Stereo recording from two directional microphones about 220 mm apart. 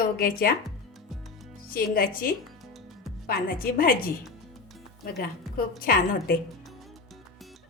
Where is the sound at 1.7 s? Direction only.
40° left (ahead or behind).